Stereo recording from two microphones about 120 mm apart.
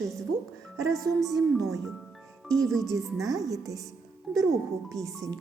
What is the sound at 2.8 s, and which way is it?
Speech, 25° right (ahead or behind).